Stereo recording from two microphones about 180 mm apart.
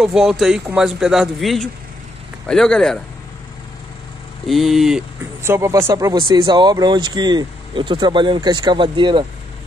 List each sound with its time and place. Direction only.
0.0 s speech: 5° right (ahead or behind)
4.5 s speech: centre (ahead or behind)
5.4 s speech: 15° right (ahead or behind)
6.1 s speech: 25° right (ahead or behind)